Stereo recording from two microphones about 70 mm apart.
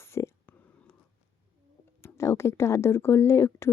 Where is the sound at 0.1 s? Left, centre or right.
Left.